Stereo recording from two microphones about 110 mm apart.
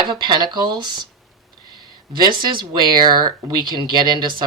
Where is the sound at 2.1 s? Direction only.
45° right (ahead or behind).